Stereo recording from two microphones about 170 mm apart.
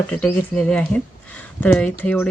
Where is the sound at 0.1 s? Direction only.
5° left (ahead or behind).